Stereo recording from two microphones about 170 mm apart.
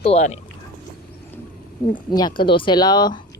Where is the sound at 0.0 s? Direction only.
40° left (ahead or behind).